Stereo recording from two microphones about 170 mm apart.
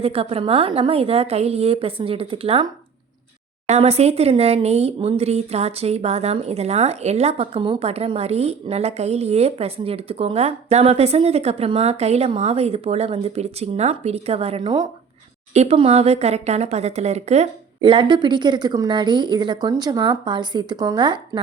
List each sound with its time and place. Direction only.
0.0 s speech: 35° right (ahead or behind)
3.7 s speech: 35° right (ahead or behind)